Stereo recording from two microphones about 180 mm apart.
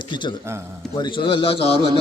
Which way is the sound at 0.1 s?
25° left (ahead or behind).